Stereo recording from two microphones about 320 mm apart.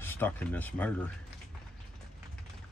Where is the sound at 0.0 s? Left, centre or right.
Centre.